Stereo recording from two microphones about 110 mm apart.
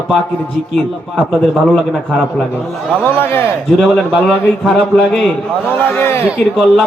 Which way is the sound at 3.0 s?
20° left (ahead or behind).